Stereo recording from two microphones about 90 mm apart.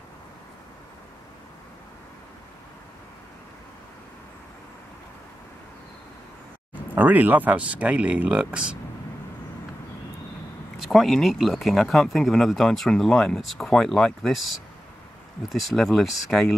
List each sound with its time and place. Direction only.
6.7 s speech: 20° right (ahead or behind)
10.9 s speech: centre (ahead or behind)
15.4 s speech: centre (ahead or behind)